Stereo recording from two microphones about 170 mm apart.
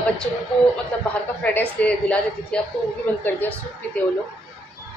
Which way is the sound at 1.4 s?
10° left (ahead or behind).